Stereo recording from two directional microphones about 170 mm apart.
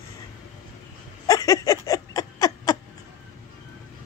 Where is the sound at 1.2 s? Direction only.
20° left (ahead or behind).